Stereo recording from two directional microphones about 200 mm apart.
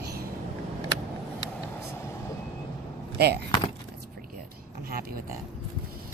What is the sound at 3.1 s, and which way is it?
Speech, 55° right (ahead or behind).